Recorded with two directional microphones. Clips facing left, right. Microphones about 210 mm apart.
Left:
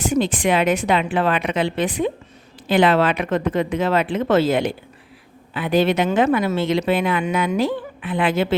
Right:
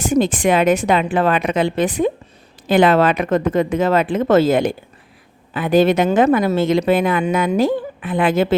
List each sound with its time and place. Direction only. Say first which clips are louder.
0.0 s speech: right 3 dB; 45° right (ahead or behind)